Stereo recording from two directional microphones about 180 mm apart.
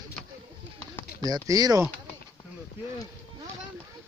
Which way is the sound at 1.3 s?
20° right (ahead or behind).